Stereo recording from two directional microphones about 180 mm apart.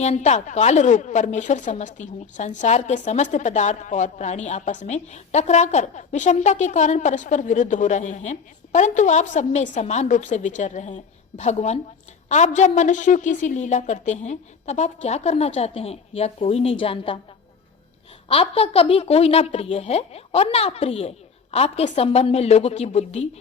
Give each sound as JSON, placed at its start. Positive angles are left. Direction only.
{"t": 0.0, "sound": "a woman's voice", "side_deg": 40}
{"t": 18.3, "sound": "a woman's voice", "side_deg": 35}